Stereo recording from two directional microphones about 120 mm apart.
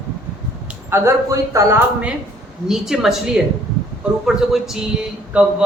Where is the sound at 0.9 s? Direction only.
20° right (ahead or behind).